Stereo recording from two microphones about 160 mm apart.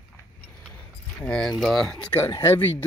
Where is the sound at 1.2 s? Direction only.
5° left (ahead or behind).